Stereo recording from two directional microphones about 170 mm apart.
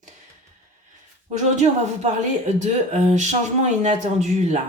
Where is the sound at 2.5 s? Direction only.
45° right (ahead or behind).